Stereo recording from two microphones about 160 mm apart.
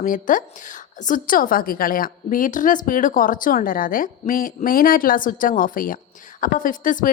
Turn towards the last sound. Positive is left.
turn(degrees=55)  # may be behind; listen again after turning